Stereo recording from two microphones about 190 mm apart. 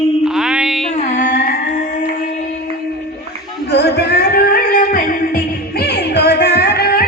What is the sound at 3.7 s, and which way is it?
Music, 60° left (ahead or behind).